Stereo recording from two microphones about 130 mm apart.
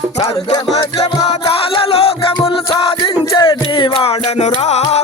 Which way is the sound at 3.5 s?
40° left (ahead or behind).